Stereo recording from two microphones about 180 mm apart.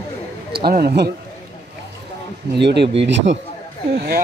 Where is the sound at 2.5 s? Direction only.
70° right (ahead or behind).